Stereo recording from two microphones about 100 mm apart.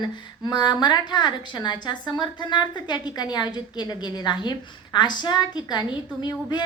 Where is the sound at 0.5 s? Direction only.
45° left (ahead or behind).